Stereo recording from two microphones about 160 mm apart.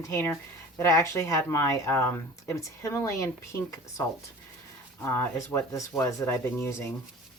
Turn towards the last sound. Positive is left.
turn(degrees=15)  # may be behind; listen again after turning